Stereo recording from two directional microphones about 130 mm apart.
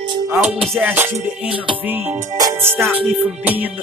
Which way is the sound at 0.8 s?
15° right (ahead or behind).